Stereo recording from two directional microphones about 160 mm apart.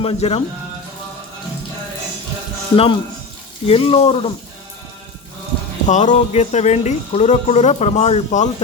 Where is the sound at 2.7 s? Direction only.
35° left (ahead or behind).